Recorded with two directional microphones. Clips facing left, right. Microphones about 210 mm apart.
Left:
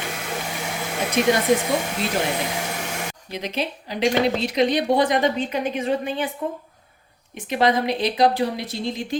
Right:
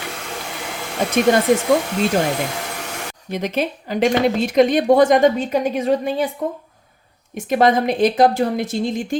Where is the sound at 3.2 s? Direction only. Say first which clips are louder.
Right 7 dB; 50° right (ahead or behind).